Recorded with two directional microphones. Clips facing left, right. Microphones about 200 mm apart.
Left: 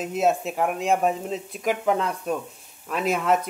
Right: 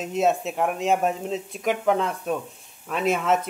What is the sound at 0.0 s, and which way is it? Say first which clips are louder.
Speech: even; centre (ahead or behind).